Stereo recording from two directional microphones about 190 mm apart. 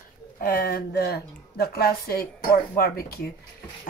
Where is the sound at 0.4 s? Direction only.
50° left (ahead or behind).